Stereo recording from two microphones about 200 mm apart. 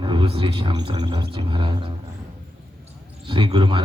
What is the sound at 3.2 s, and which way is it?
Speech, 25° right (ahead or behind).